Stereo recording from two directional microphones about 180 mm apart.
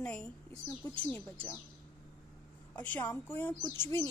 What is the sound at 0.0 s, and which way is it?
Speech, 5° left (ahead or behind).